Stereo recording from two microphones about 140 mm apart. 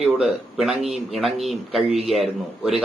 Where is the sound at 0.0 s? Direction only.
Centre (ahead or behind).